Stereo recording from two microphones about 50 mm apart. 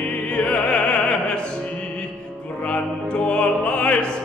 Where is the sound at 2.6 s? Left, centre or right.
Left.